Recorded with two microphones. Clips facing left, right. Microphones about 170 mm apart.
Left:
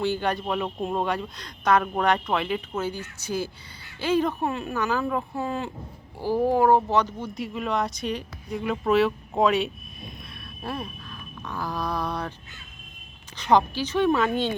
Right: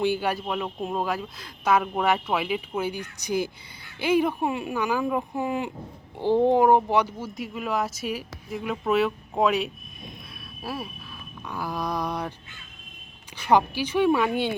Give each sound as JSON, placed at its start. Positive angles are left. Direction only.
{"t": 0.0, "sound": "speech", "side_deg": -10}
{"t": 7.3, "sound": "speech", "side_deg": 0}
{"t": 13.3, "sound": "speech", "side_deg": -10}